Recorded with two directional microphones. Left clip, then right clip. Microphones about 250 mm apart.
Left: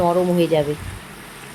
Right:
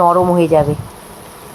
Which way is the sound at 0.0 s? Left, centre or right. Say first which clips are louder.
Right 7 dB; centre.